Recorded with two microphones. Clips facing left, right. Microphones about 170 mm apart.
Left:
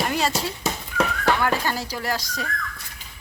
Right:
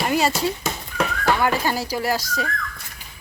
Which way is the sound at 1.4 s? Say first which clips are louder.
Right 2 dB; 10° right (ahead or behind).